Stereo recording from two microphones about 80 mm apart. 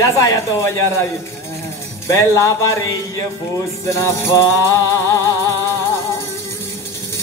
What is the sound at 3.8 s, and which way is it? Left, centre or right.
Speech, left.